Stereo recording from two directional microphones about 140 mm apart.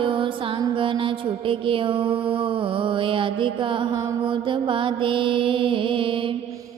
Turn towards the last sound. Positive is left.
turn(degrees=-40)  # may be behind; listen again after turning